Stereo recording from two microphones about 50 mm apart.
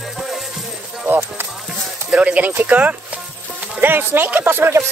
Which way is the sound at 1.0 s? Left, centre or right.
Right.